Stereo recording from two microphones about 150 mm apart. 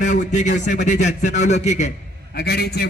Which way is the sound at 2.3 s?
90° left.